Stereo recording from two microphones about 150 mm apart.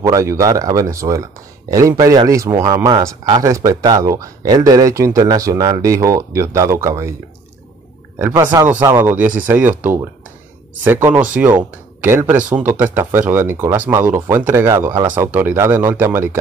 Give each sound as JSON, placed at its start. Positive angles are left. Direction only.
{"t": 0.0, "sound": "speech", "side_deg": -20}
{"t": 8.4, "sound": "speech", "side_deg": -20}